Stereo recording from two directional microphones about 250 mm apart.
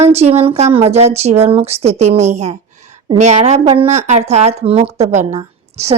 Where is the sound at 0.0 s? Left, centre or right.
Right.